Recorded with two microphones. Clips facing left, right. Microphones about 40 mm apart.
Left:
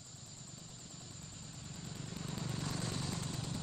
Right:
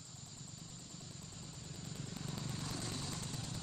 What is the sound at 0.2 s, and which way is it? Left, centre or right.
Vehicle, centre.